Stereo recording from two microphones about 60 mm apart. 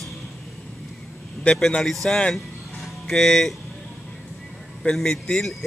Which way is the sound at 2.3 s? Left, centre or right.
Centre.